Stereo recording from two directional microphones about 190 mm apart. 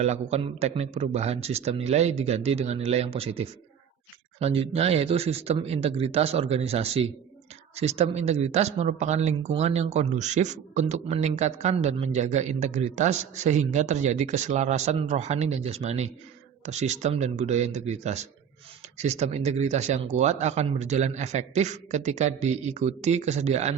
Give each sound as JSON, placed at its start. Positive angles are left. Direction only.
{"t": 0.0, "sound": "speech", "side_deg": -35}